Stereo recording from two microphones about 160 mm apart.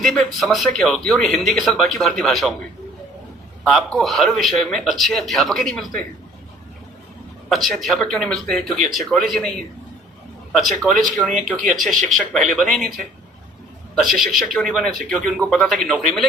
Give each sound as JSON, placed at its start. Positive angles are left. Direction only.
{"t": 0.0, "sound": "speech", "side_deg": 0}
{"t": 3.7, "sound": "speech", "side_deg": 0}
{"t": 7.5, "sound": "speech", "side_deg": 0}
{"t": 13.9, "sound": "speech", "side_deg": 0}